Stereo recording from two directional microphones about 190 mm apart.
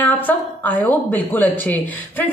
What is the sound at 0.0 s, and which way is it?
A woman's voice, 10° left (ahead or behind).